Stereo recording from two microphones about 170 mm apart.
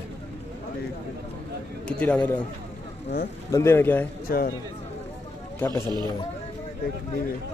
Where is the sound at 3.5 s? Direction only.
15° left (ahead or behind).